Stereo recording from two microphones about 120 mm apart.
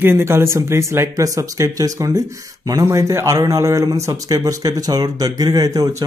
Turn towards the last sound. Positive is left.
turn(degrees=-30)  # may be behind; listen again after turning